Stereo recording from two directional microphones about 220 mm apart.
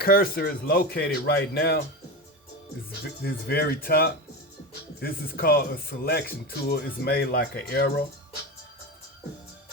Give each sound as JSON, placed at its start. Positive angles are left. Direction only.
{"t": 0.0, "sound": "speech", "side_deg": 45}
{"t": 3.2, "sound": "speech", "side_deg": 45}